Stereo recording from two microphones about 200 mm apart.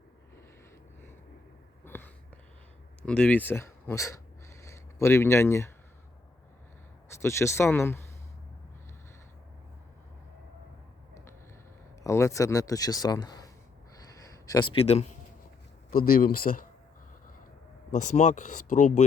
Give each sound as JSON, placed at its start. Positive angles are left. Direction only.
{"t": 1.8, "sound": "a sound", "side_deg": 10}
{"t": 3.1, "sound": "speech", "side_deg": 5}
{"t": 7.1, "sound": "speech", "side_deg": 15}
{"t": 12.0, "sound": "speech", "side_deg": 15}
{"t": 13.9, "sound": "a sound", "side_deg": 15}
{"t": 14.7, "sound": "a man's voice", "side_deg": 30}
{"t": 15.9, "sound": "speech", "side_deg": 45}
{"t": 17.9, "sound": "speech", "side_deg": 35}